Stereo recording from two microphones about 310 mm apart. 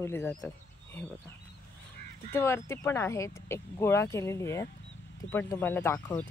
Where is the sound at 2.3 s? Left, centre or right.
Centre.